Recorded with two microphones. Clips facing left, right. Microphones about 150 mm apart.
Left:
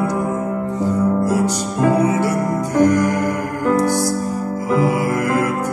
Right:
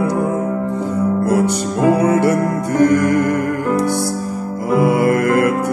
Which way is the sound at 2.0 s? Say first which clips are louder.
Right 3 dB; 60° right (ahead or behind).